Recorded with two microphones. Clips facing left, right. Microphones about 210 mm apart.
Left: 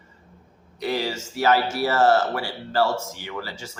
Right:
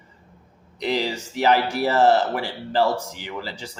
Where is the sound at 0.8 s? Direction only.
15° right (ahead or behind).